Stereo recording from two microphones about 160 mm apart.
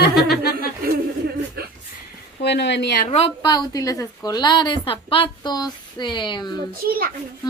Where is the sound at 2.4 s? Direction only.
90° left.